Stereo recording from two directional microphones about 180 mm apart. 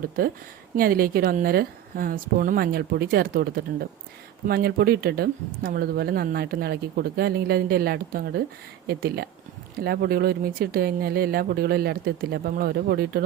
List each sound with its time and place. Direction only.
0.2 s speech: 55° right (ahead or behind)